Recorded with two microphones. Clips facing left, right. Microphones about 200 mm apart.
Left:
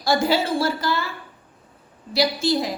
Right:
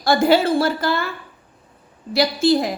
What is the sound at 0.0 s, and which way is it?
A woman's voice, 60° right (ahead or behind).